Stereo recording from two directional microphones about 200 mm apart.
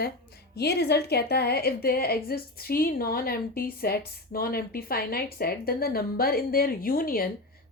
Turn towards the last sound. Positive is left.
turn(degrees=45)  # may be behind; listen again after turning